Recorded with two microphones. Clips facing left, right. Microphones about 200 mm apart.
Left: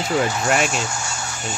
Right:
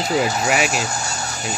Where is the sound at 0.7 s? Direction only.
35° right (ahead or behind).